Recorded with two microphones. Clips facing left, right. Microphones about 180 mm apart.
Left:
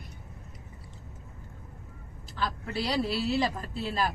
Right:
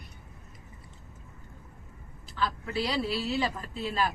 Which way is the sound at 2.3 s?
40° left (ahead or behind).